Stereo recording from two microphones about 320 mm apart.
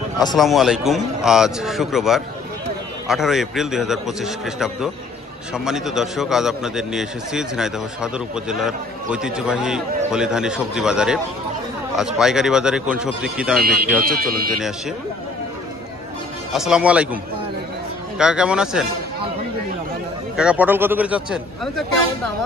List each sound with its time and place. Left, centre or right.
0.4 s a man's voice: centre
13.6 s speech: right
16.5 s a man's voice: centre
20.3 s a man's voice: centre